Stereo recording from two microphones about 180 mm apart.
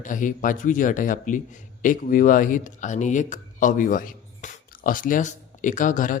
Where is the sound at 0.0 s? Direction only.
45° left (ahead or behind).